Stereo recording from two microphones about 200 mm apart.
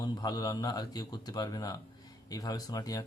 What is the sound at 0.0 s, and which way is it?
Speech, 20° left (ahead or behind).